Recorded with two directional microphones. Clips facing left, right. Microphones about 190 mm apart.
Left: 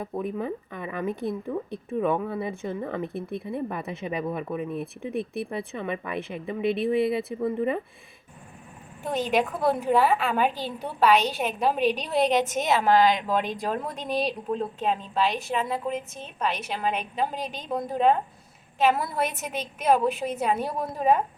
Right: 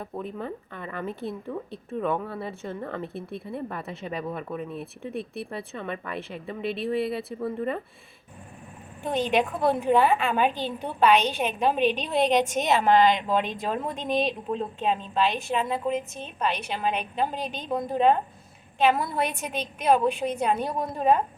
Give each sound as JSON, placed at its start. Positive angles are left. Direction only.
{"t": 0.0, "sound": "speech", "side_deg": 15}
{"t": 9.0, "sound": "a woman's voice", "side_deg": 5}